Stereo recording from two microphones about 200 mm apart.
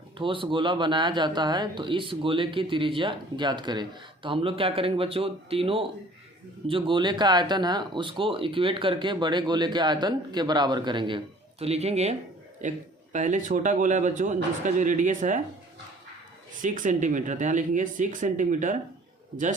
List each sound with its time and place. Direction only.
0.2 s speech: 25° right (ahead or behind)
16.6 s speech: 40° right (ahead or behind)